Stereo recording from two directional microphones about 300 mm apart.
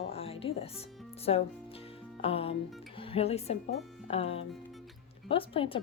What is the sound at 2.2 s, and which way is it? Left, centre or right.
Music, centre.